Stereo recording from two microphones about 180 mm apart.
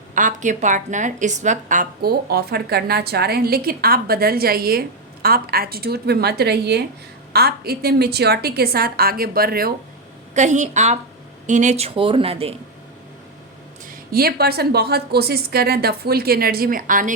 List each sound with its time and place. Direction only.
0.1 s a woman's voice: 45° right (ahead or behind)
10.3 s speech: 40° right (ahead or behind)
13.9 s a woman's voice: 55° right (ahead or behind)